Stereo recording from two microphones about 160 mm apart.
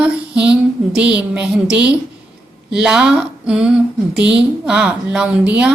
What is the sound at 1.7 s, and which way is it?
A woman's voice, 10° right (ahead or behind).